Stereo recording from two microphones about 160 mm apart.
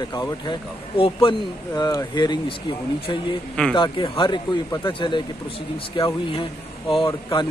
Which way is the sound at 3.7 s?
30° left (ahead or behind).